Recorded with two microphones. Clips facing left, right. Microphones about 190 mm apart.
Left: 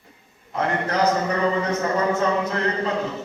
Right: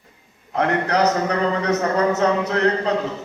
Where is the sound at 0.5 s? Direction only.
70° right (ahead or behind).